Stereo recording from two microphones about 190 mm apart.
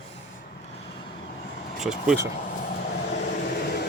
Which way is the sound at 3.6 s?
60° left (ahead or behind).